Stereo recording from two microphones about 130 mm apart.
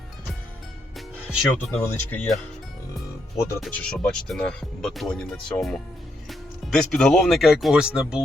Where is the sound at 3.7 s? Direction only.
5° left (ahead or behind).